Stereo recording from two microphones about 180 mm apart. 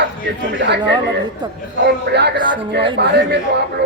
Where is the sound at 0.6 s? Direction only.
70° right (ahead or behind).